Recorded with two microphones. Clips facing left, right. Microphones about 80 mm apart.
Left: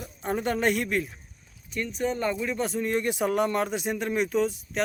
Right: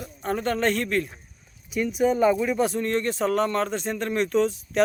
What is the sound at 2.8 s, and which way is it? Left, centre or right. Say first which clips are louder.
Speech: right 2 dB; centre.